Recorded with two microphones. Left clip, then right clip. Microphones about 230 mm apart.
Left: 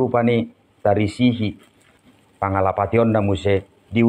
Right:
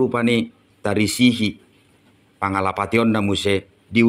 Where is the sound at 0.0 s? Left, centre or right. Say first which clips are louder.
Left 1 dB; right.